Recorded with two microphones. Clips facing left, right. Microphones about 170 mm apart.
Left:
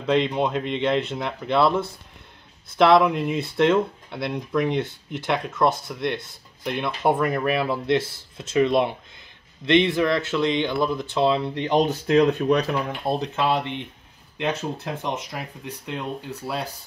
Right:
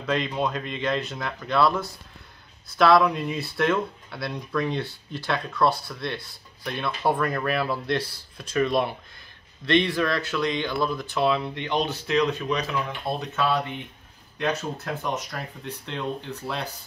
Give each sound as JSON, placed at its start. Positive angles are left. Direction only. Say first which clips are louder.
{"t": 0.0, "sound": "speech", "louder": "left 4 dB", "side_deg": 25}
{"t": 13.0, "sound": "speech", "louder": "left 3 dB", "side_deg": 20}
{"t": 15.3, "sound": "speech", "louder": "left 1 dB", "side_deg": 10}